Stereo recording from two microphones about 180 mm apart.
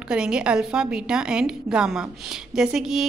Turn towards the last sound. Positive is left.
turn(degrees=0)  # may be behind; listen again after turning